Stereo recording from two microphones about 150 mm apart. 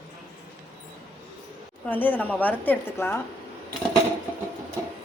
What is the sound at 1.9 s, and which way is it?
A woman's voice, 10° left (ahead or behind).